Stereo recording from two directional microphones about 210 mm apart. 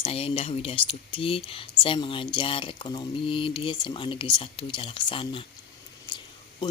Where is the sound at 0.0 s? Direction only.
25° left (ahead or behind).